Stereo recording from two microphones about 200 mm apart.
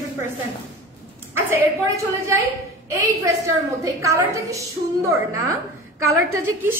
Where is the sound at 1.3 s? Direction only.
10° right (ahead or behind).